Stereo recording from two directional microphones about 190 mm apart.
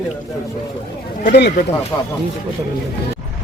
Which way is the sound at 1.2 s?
55° left (ahead or behind).